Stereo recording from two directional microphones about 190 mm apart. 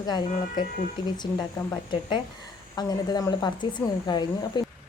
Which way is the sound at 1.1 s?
20° left (ahead or behind).